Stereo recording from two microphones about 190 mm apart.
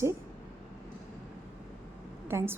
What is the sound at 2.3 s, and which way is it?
Speech, 15° right (ahead or behind).